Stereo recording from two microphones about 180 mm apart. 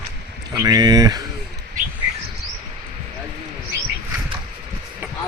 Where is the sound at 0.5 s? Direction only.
20° right (ahead or behind).